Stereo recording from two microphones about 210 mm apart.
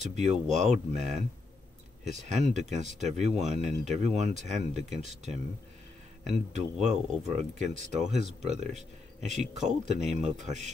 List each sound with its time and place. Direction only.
0.0 s speech: 35° right (ahead or behind)